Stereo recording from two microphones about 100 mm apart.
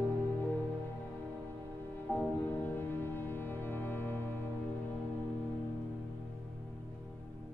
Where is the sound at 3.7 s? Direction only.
20° left (ahead or behind).